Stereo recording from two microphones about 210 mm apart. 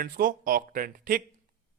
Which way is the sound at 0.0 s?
40° right (ahead or behind).